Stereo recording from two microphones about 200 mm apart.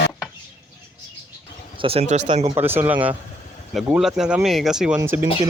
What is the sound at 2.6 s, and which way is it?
Speech, 10° right (ahead or behind).